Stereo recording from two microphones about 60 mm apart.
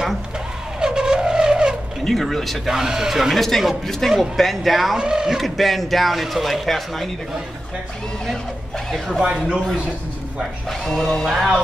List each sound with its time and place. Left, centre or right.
0.7 s vehicle: centre
2.0 s speech: centre
4.9 s speech: centre
8.3 s speech: centre
9.2 s speech: centre
10.7 s speech: centre